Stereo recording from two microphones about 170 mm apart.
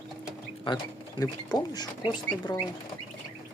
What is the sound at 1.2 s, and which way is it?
Speech, 25° left (ahead or behind).